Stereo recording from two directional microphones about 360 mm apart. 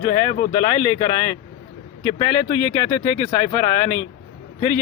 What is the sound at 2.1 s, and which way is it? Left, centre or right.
Speech, centre.